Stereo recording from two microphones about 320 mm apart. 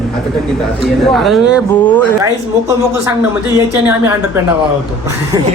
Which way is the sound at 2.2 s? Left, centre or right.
Centre.